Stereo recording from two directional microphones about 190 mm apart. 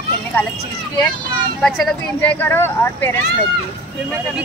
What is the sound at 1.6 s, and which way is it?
Speech, 5° left (ahead or behind).